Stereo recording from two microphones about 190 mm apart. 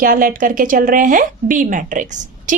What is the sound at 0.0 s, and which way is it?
Speech, 50° right (ahead or behind).